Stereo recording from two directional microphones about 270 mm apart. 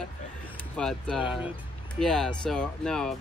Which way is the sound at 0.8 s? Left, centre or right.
Centre.